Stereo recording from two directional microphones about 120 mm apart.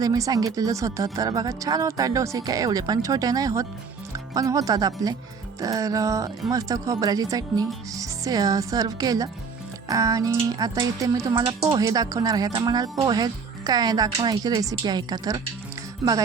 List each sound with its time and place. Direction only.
0.0 s speech: 30° right (ahead or behind)